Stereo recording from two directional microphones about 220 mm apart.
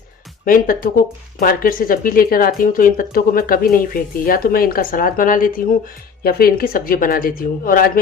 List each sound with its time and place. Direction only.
0.4 s speech: 40° left (ahead or behind)